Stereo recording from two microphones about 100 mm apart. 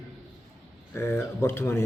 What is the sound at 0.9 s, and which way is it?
Speech, 25° left (ahead or behind).